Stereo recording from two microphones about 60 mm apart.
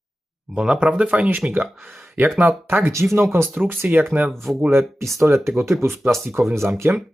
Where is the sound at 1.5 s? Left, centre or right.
Right.